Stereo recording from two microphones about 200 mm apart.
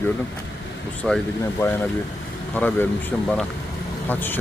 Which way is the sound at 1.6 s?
10° left (ahead or behind).